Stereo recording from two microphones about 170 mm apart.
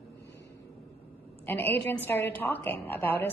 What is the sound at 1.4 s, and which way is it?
A woman's voice, 10° left (ahead or behind).